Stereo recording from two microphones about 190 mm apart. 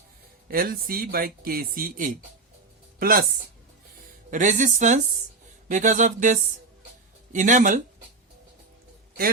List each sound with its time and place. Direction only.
0.4 s speech: 50° right (ahead or behind)
4.3 s music: 40° right (ahead or behind)